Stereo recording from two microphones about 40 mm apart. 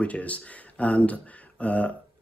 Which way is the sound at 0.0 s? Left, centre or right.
Left.